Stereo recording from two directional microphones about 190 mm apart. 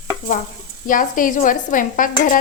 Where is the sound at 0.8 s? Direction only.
45° left (ahead or behind).